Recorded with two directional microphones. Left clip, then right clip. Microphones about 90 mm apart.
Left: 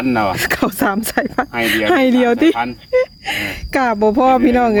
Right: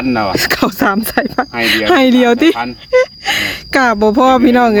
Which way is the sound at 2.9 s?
45° right (ahead or behind).